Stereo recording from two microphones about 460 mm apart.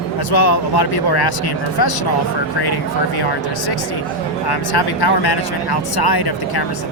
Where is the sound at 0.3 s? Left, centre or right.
Left.